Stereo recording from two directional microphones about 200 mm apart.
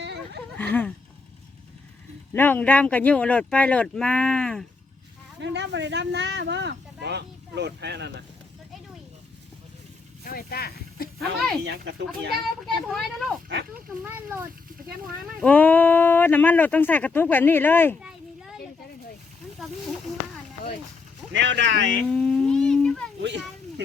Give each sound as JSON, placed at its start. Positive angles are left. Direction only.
{"t": 0.5, "sound": "a sound", "side_deg": 10}
{"t": 2.3, "sound": "speech", "side_deg": 10}
{"t": 5.4, "sound": "speech", "side_deg": -60}
{"t": 10.2, "sound": "speech", "side_deg": 50}
{"t": 11.6, "sound": "speech", "side_deg": -60}
{"t": 12.6, "sound": "a child's voice", "side_deg": 0}
{"t": 13.5, "sound": "speech", "side_deg": -55}
{"t": 14.0, "sound": "speech", "side_deg": -10}
{"t": 15.4, "sound": "speech", "side_deg": 5}
{"t": 21.3, "sound": "speech", "side_deg": -60}
{"t": 22.1, "sound": "a sound", "side_deg": 5}
{"t": 23.2, "sound": "speech", "side_deg": -60}